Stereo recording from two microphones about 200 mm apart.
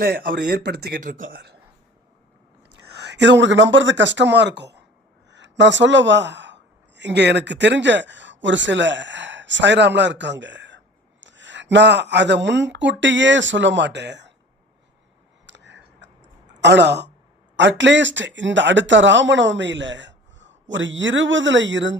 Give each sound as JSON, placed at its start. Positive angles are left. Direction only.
{"t": 0.0, "sound": "speech", "side_deg": -45}
{"t": 1.0, "sound": "a man's voice", "side_deg": -40}
{"t": 2.7, "sound": "speech", "side_deg": -55}
{"t": 15.4, "sound": "a sound", "side_deg": -65}
{"t": 16.6, "sound": "speech", "side_deg": -60}